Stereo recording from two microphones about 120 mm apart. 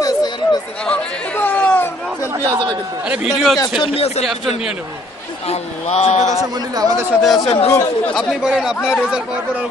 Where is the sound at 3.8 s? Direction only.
55° left (ahead or behind).